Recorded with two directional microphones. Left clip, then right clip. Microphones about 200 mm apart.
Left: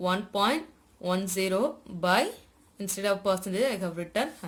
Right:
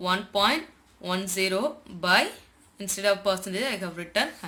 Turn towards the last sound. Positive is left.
turn(degrees=55)  # may be behind; listen again after turning